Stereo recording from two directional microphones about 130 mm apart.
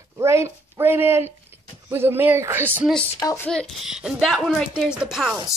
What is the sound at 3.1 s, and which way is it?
Speech, 25° left (ahead or behind).